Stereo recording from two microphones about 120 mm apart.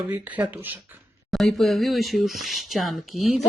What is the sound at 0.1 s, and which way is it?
Speech, 15° right (ahead or behind).